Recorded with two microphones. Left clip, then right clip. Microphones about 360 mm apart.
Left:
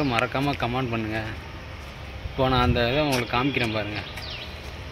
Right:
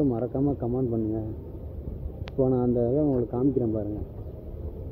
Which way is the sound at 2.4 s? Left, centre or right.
Left.